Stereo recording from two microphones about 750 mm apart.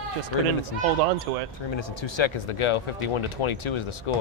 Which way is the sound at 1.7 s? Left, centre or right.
Left.